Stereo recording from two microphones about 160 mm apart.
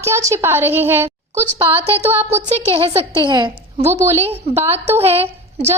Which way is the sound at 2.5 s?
40° right (ahead or behind).